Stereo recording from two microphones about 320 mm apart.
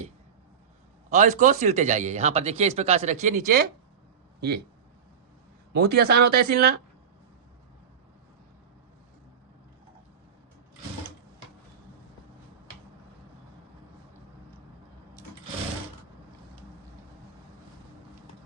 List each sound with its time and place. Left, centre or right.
1.1 s speech: right
5.7 s speech: right